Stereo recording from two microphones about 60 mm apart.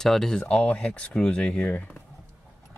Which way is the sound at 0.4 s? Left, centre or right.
Centre.